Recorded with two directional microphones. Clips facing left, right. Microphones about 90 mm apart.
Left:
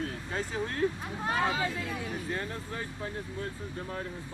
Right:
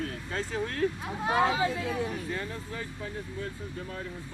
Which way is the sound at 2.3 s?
35° left (ahead or behind).